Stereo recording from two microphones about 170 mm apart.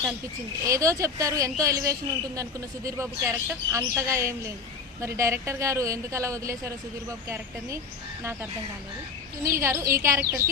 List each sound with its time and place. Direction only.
0.6 s a woman's voice: 20° right (ahead or behind)